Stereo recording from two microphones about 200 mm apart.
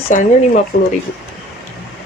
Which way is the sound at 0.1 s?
40° left (ahead or behind).